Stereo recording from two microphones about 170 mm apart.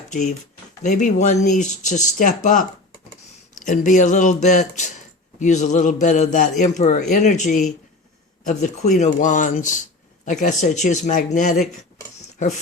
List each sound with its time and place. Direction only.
0.1 s speech: 45° left (ahead or behind)